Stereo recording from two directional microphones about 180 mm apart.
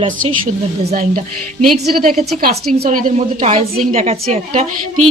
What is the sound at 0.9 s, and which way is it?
Speech, 50° right (ahead or behind).